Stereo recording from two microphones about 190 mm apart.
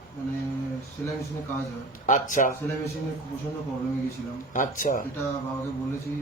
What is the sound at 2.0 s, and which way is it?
Speech, 45° left (ahead or behind).